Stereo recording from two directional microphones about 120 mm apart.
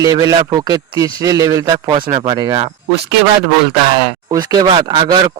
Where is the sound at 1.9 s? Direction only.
35° right (ahead or behind).